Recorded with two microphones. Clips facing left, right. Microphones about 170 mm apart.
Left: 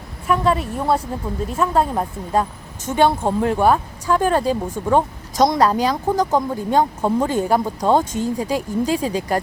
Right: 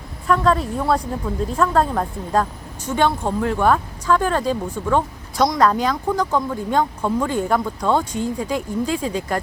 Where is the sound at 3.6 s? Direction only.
15° left (ahead or behind).